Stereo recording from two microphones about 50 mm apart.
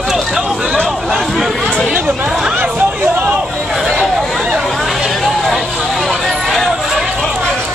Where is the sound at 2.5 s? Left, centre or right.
Right.